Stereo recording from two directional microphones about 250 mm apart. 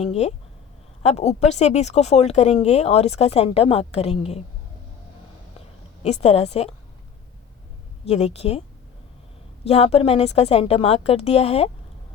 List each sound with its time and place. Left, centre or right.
0.0 s speech: left
6.0 s speech: left
8.0 s speech: left
9.6 s speech: left